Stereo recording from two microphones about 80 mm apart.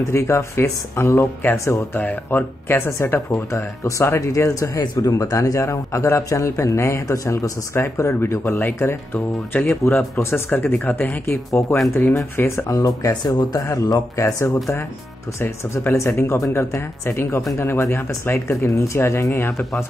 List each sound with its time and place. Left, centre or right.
0.0 s speech: left
13.2 s speech: left
14.2 s speech: left
15.9 s speech: left